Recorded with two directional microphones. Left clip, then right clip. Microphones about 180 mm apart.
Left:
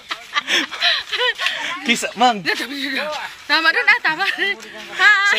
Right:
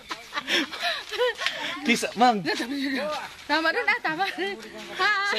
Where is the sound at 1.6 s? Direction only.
35° left (ahead or behind).